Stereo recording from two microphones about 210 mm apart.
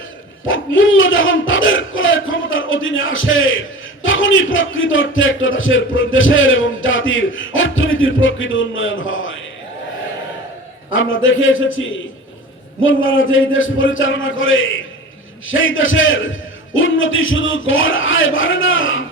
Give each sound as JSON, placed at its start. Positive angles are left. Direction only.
{"t": 0.4, "sound": "a man's voice", "side_deg": 65}
{"t": 10.9, "sound": "a man's voice", "side_deg": 65}